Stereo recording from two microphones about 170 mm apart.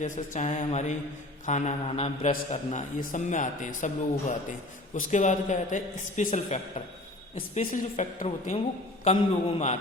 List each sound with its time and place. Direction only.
0.0 s a man's voice: 45° left (ahead or behind)